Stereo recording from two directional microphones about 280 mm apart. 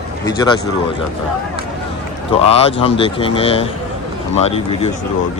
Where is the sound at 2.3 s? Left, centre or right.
Left.